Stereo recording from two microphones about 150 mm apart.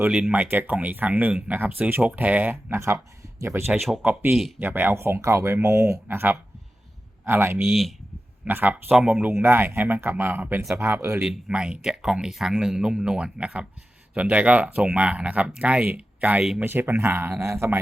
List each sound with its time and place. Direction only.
0.0 s speech: 10° right (ahead or behind)
3.8 s speech: centre (ahead or behind)
4.0 s speech: 15° right (ahead or behind)
7.7 s speech: centre (ahead or behind)
8.4 s speech: 10° right (ahead or behind)
11.3 s speech: 5° right (ahead or behind)